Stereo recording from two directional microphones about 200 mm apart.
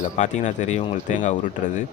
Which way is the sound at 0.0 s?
35° left (ahead or behind).